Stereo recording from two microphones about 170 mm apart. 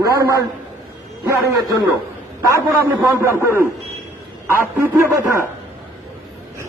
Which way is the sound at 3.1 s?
15° right (ahead or behind).